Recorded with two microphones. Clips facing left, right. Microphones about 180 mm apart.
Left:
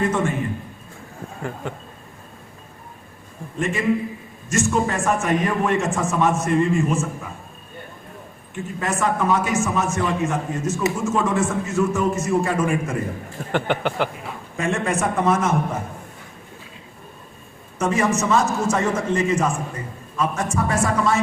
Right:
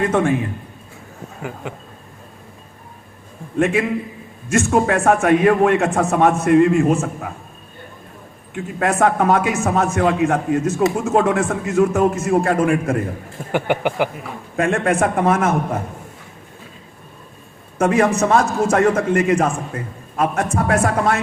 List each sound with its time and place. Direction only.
0.0 s a man's voice: 55° right (ahead or behind)
1.4 s speech: 5° right (ahead or behind)
3.6 s a man's voice: 60° right (ahead or behind)
8.5 s a man's voice: 60° right (ahead or behind)
13.5 s speech: 10° right (ahead or behind)
14.5 s a man's voice: 55° right (ahead or behind)
17.7 s a man's voice: 60° right (ahead or behind)